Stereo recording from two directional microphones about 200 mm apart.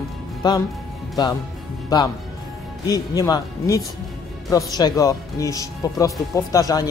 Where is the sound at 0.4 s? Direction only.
20° left (ahead or behind).